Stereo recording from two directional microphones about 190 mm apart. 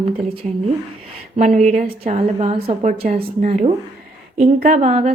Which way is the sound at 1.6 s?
35° right (ahead or behind).